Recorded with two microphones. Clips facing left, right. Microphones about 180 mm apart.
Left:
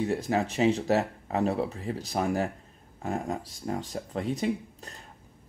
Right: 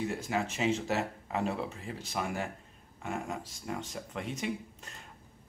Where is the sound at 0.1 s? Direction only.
35° left (ahead or behind).